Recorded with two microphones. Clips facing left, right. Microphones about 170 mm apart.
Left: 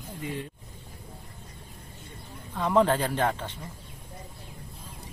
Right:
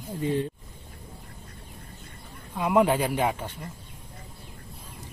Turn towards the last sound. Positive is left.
turn(degrees=-10)  # may be behind; listen again after turning